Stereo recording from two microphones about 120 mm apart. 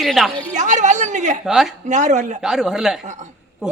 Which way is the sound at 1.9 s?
85° right.